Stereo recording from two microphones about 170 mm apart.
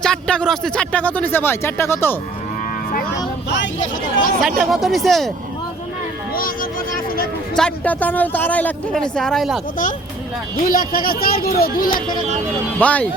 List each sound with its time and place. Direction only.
0.0 s speech: 5° left (ahead or behind)
4.4 s speech: centre (ahead or behind)
6.3 s vehicle: 55° left (ahead or behind)
7.5 s speech: 5° left (ahead or behind)
10.6 s speech: 55° left (ahead or behind)
12.8 s speech: 10° left (ahead or behind)